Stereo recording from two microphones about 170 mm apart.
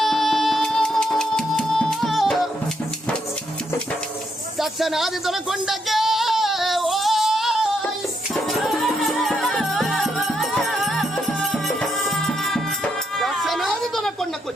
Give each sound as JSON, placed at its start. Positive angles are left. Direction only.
{"t": 0.0, "sound": "music", "side_deg": 0}
{"t": 4.6, "sound": "music", "side_deg": 0}